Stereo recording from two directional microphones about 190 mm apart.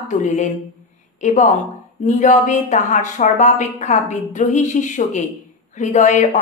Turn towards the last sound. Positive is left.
turn(degrees=40)  # may be behind; listen again after turning